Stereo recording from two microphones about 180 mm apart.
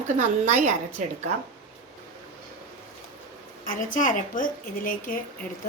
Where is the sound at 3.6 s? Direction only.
50° left (ahead or behind).